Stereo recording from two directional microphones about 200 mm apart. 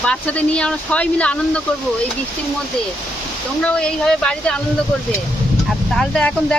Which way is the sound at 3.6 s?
5° left (ahead or behind).